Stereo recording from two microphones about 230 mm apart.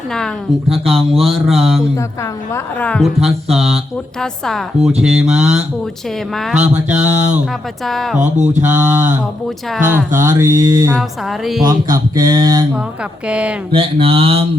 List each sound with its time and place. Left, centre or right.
0.7 s speech: centre
10.9 s speech: centre
11.6 s speech: centre
13.2 s speech: centre
13.7 s speech: right